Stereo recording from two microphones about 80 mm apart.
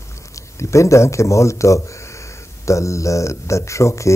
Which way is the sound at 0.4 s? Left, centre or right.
Left.